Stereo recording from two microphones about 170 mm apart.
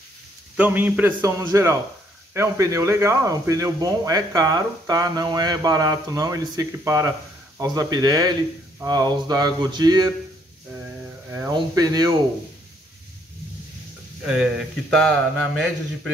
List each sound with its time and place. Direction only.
0.6 s a man's voice: 10° right (ahead or behind)
11.3 s speech: 20° right (ahead or behind)
14.2 s speech: centre (ahead or behind)